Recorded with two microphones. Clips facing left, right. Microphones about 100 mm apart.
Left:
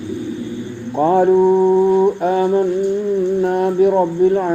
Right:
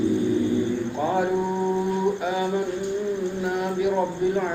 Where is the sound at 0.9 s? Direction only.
45° left (ahead or behind).